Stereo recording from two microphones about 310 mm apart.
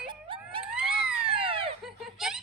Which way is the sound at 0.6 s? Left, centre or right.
Centre.